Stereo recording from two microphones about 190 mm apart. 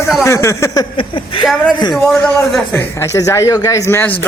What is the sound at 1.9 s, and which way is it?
Speech, centre (ahead or behind).